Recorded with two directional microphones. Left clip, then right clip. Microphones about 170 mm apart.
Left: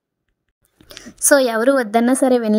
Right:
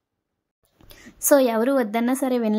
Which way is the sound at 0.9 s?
30° left (ahead or behind).